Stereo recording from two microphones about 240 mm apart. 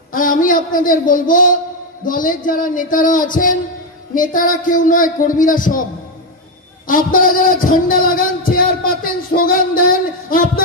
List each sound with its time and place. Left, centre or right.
0.1 s a man's voice: left
6.9 s a man's voice: left
8.5 s a sound: left